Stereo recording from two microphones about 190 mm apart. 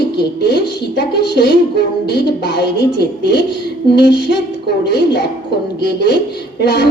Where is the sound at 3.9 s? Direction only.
60° left (ahead or behind).